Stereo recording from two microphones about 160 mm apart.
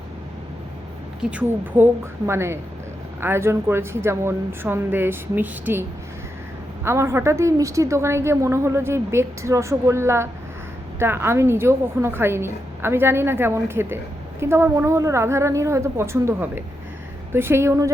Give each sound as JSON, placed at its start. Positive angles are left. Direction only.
{"t": 1.2, "sound": "a woman's voice", "side_deg": -10}
{"t": 6.8, "sound": "a woman's voice", "side_deg": -15}